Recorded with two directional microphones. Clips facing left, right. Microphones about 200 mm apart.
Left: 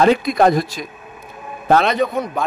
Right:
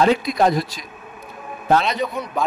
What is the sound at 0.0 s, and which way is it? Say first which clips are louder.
A man's voice: left 3 dB; 55° left (ahead or behind).